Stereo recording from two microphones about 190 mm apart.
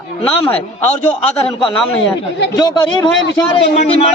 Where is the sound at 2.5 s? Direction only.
20° left (ahead or behind).